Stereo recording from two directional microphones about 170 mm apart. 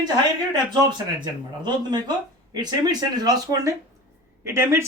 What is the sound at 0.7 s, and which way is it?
Speech, 25° right (ahead or behind).